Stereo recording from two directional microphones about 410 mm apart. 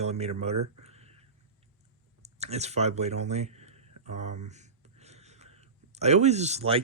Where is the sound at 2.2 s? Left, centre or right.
Centre.